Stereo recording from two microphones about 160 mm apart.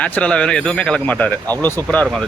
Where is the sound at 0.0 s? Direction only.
5° left (ahead or behind).